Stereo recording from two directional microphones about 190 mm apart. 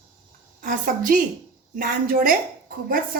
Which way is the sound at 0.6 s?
45° right (ahead or behind).